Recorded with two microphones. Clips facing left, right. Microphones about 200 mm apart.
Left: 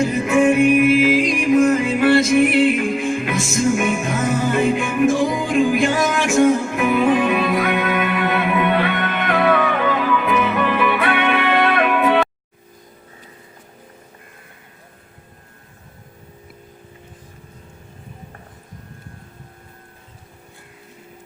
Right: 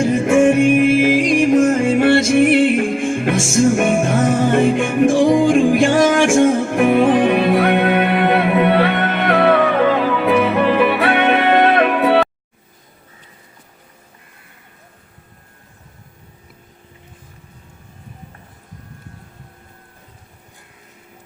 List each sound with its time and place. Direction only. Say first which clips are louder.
0.2 s music: right 2 dB; 45° right (ahead or behind)
7.9 s music: right 5 dB; 30° right (ahead or behind)
9.4 s music: right 4 dB; 35° right (ahead or behind)